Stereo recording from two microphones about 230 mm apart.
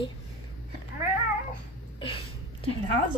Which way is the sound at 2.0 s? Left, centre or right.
Left.